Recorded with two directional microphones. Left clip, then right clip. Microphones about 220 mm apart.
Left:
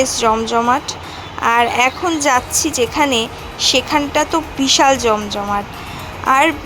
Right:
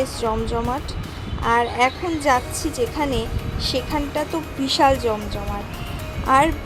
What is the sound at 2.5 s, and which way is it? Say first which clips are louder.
Speech: left 9 dB; 30° left (ahead or behind).